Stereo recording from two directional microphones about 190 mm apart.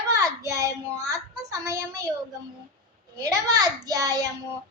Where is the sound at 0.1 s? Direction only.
15° right (ahead or behind).